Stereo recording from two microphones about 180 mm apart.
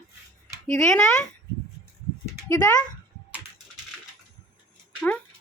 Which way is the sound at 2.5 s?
20° left (ahead or behind).